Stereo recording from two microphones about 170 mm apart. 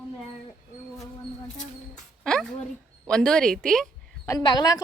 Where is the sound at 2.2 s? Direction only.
5° left (ahead or behind).